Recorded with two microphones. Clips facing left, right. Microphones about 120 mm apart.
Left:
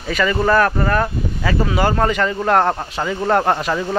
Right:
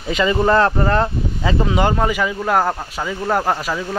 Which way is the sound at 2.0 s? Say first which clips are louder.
Left 1 dB; 10° right (ahead or behind).